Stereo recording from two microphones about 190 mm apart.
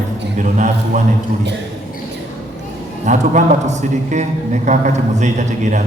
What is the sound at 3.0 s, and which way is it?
A man's voice, 40° right (ahead or behind).